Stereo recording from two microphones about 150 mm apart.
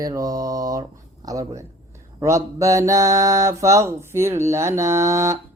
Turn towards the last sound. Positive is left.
turn(degrees=-20)  # may be behind; listen again after turning